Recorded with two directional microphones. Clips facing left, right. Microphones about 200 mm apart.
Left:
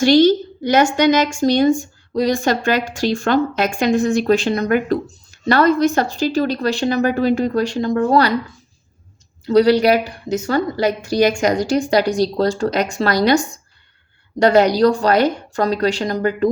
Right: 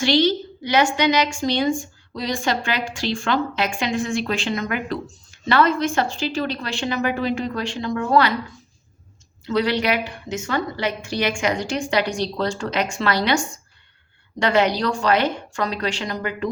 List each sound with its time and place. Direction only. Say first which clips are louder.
0.0 s a woman's voice: left 7 dB; 45° left (ahead or behind)
9.4 s a woman's voice: left 9 dB; 40° left (ahead or behind)